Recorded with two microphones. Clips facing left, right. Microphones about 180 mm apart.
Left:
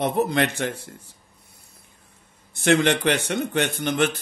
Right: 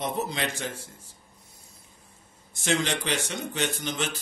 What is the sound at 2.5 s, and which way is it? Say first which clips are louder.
A man's voice: left 8 dB; 60° left (ahead or behind).